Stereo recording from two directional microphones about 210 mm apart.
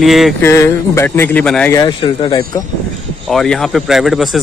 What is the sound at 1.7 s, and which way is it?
Speech, 20° left (ahead or behind).